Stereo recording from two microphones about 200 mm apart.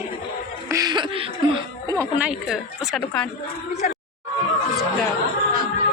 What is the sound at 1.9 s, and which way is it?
A woman's voice, 10° right (ahead or behind).